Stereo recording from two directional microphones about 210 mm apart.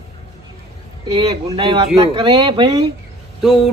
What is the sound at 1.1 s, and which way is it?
Speech, 20° right (ahead or behind).